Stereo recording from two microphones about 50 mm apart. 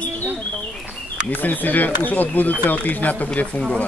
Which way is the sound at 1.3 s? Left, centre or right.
Left.